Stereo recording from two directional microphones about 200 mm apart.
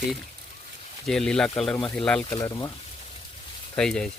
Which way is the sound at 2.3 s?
15° left (ahead or behind).